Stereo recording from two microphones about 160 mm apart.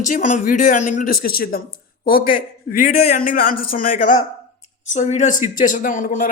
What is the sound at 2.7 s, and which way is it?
Speech, 55° left (ahead or behind).